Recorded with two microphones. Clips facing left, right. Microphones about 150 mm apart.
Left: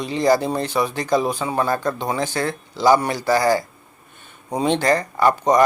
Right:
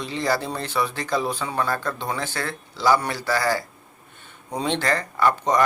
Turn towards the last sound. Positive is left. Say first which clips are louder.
# left 4 dB
turn(degrees=15)  # may be behind; listen again after turning